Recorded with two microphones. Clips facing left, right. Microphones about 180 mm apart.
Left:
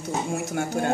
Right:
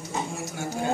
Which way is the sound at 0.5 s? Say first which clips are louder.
Left 4 dB; 60° left (ahead or behind).